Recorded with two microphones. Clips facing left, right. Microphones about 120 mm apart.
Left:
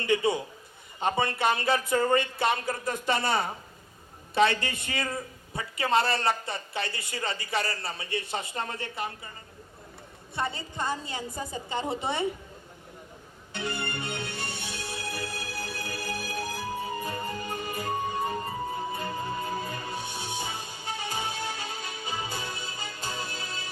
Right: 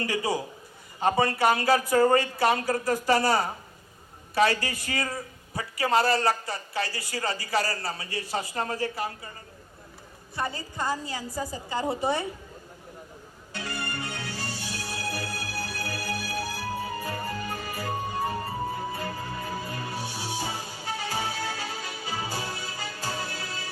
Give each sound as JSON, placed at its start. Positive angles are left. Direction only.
{"t": 0.0, "sound": "a woman's voice", "side_deg": 25}
{"t": 10.3, "sound": "a woman's voice", "side_deg": 25}
{"t": 13.5, "sound": "music", "side_deg": 25}